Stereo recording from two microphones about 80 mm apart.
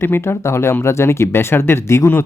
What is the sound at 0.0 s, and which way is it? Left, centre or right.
Speech, left.